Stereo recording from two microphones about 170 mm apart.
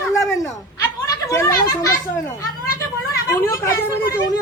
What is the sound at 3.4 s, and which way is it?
Speech, 20° left (ahead or behind).